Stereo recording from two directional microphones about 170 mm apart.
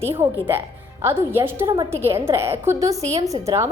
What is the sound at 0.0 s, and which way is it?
A woman's voice, 15° right (ahead or behind).